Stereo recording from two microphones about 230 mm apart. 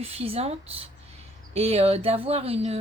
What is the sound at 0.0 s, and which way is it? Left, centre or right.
Speech, right.